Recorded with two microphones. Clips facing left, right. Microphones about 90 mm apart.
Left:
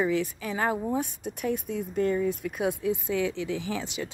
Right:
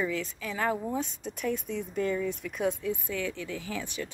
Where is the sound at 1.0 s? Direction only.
55° left (ahead or behind).